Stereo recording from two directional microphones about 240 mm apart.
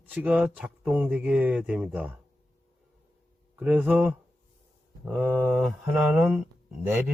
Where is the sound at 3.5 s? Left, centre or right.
Centre.